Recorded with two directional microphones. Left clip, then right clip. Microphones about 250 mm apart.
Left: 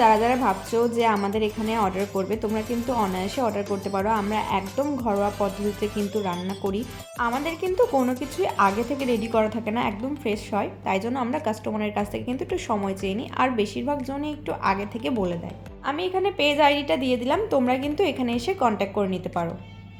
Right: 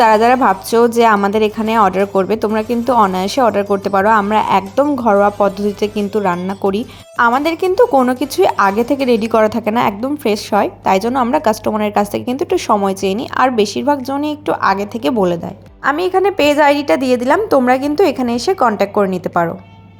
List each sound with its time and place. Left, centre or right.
0.0 s a woman's voice: right